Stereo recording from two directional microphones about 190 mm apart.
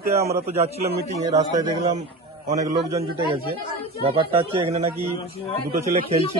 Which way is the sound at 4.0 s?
30° right (ahead or behind).